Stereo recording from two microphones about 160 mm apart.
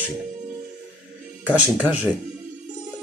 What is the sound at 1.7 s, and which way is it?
Speech, 10° right (ahead or behind).